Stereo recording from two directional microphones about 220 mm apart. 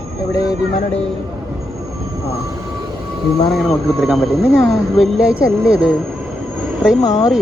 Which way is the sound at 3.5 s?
Centre (ahead or behind).